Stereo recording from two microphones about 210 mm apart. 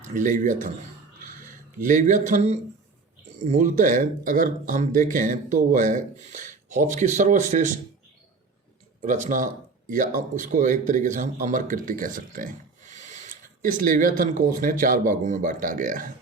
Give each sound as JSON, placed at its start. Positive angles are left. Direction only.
{"t": 0.1, "sound": "speech", "side_deg": -40}
{"t": 1.8, "sound": "speech", "side_deg": -40}
{"t": 9.0, "sound": "speech", "side_deg": -35}